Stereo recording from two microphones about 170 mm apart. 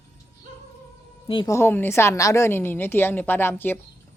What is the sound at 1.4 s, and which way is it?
A woman's voice, 15° left (ahead or behind).